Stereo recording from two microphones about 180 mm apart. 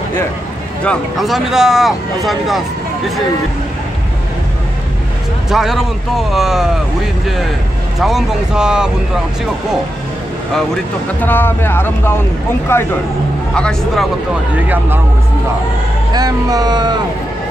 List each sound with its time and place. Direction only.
0.8 s speech: centre (ahead or behind)
5.5 s speech: centre (ahead or behind)
8.0 s speech: 5° right (ahead or behind)
11.1 s speech: 10° left (ahead or behind)
14.5 s speech: 10° right (ahead or behind)
16.1 s speech: 20° right (ahead or behind)